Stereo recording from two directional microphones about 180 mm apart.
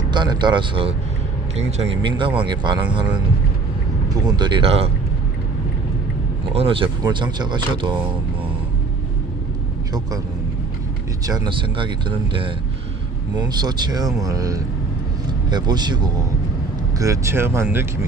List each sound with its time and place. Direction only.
0.1 s speech: 25° right (ahead or behind)
4.1 s speech: 20° right (ahead or behind)
6.5 s speech: 30° right (ahead or behind)
11.2 s a man's voice: 20° right (ahead or behind)